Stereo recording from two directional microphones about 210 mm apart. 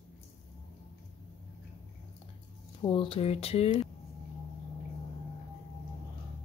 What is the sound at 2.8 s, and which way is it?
Speech, 25° left (ahead or behind).